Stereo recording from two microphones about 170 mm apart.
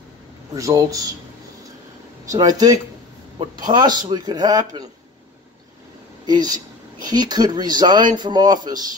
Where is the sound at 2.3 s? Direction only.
20° right (ahead or behind).